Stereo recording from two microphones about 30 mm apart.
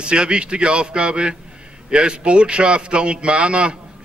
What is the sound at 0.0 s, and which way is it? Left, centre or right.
A man's voice, right.